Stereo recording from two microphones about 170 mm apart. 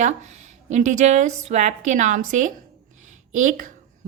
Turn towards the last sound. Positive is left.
turn(degrees=-50)  # may be behind; listen again after turning